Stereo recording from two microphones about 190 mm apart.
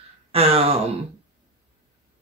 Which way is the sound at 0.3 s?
30° right (ahead or behind).